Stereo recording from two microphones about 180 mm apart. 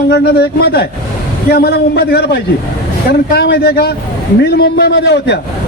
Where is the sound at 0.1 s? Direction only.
60° left (ahead or behind).